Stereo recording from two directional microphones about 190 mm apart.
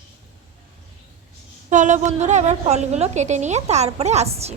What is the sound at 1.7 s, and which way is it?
A woman's voice, 40° right (ahead or behind).